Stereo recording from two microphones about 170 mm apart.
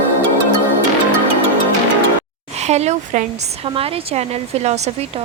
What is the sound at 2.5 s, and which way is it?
A woman's voice, 40° right (ahead or behind).